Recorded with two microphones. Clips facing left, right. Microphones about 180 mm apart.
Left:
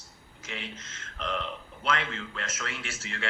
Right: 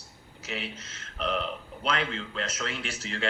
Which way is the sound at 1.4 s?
35° right (ahead or behind).